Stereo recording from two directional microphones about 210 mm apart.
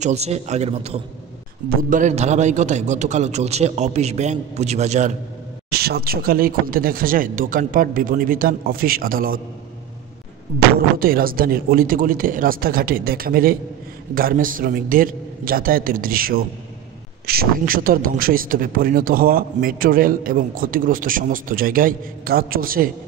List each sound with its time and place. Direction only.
0.0 s a man's voice: 30° right (ahead or behind)
5.7 s a man's voice: 50° right (ahead or behind)
11.0 s a man's voice: 45° right (ahead or behind)